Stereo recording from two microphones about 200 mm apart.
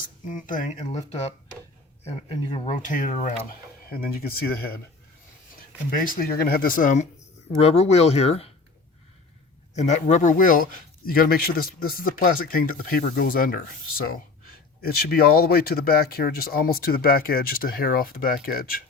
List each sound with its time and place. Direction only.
0.3 s speech: 40° left (ahead or behind)
2.0 s speech: 25° left (ahead or behind)
2.7 s speech: 40° left (ahead or behind)
6.1 s speech: 45° left (ahead or behind); by 8.4 s 30° left (ahead or behind)
9.7 s speech: 35° left (ahead or behind)